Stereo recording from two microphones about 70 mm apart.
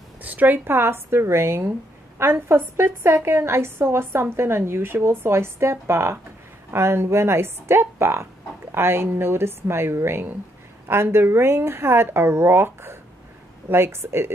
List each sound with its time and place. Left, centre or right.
0.2 s a woman's voice: right